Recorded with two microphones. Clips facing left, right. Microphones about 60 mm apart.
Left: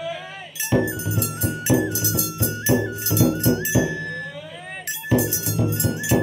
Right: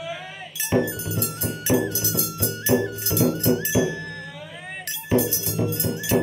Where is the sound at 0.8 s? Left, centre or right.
Left.